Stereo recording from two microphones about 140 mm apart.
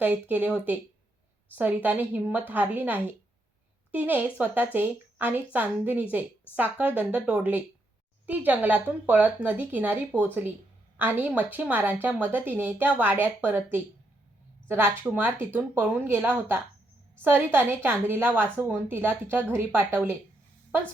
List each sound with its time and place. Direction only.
0.0 s a woman's voice: 10° right (ahead or behind)